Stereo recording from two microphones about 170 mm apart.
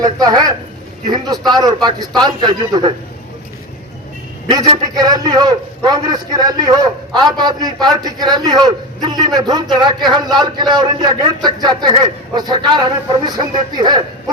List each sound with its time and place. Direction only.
0.0 s a man's voice: 25° right (ahead or behind)
4.4 s a man's voice: 30° right (ahead or behind)